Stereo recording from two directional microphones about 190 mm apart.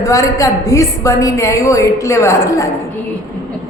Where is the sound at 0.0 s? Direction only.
15° left (ahead or behind).